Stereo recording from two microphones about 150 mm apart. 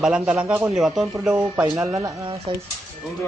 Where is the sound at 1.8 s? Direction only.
25° right (ahead or behind).